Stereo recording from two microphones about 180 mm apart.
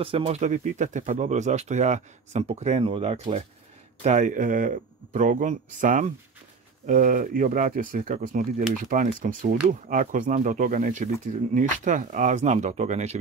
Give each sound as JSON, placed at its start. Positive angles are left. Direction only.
{"t": 0.0, "sound": "speech", "side_deg": -30}
{"t": 0.4, "sound": "speech", "side_deg": -45}